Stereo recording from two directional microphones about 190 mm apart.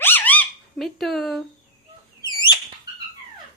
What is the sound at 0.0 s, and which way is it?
Dog, 10° left (ahead or behind).